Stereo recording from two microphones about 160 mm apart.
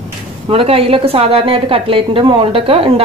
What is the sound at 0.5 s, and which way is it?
A woman's voice, 35° right (ahead or behind).